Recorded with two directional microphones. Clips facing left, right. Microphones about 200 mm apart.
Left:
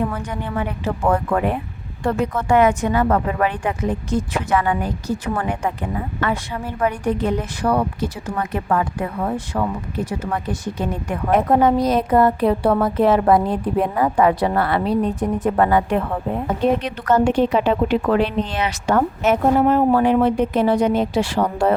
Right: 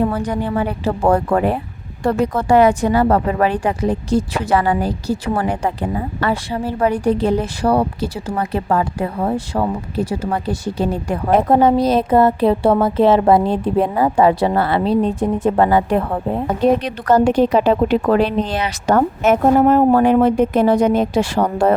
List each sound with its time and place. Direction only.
0.0 s a woman's voice: 35° right (ahead or behind)